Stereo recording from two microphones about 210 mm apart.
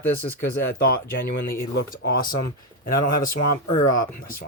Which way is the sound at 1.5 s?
45° left (ahead or behind).